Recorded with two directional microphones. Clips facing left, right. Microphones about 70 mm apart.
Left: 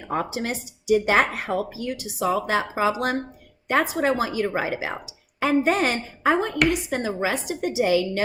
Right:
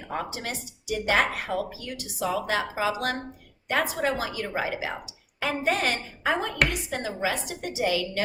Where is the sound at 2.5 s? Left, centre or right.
Left.